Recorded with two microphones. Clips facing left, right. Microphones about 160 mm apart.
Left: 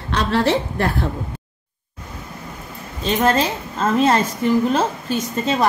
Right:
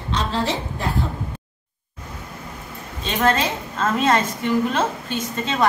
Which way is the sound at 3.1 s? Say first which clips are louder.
Left 1 dB; 30° left (ahead or behind).